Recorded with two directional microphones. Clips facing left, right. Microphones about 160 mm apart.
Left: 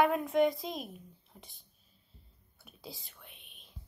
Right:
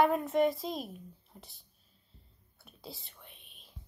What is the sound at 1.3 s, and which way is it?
Whispering, centre (ahead or behind).